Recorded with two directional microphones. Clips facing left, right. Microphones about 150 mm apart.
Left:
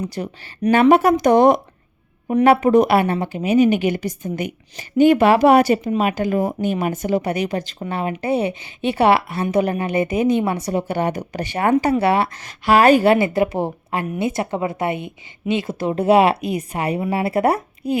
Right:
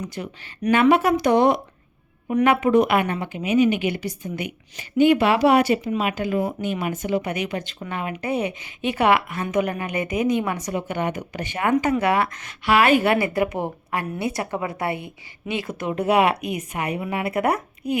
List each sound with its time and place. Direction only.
0.0 s speech: 35° left (ahead or behind)